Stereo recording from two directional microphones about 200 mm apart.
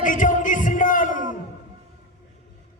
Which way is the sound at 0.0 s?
40° left (ahead or behind).